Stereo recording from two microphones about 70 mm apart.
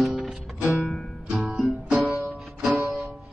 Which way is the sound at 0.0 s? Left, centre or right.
Centre.